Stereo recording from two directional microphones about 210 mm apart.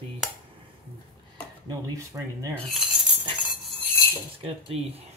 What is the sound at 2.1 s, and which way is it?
Rub, 15° right (ahead or behind).